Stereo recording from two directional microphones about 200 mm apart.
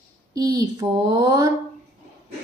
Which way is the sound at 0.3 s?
15° right (ahead or behind).